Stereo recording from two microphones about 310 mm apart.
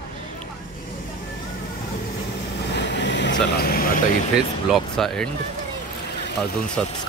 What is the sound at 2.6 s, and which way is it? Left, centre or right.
Vehicle, left.